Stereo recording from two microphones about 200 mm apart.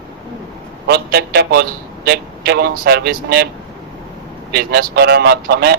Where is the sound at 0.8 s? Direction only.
55° right (ahead or behind).